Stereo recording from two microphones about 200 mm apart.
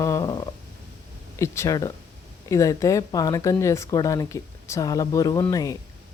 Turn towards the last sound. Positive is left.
turn(degrees=15)  # may be behind; listen again after turning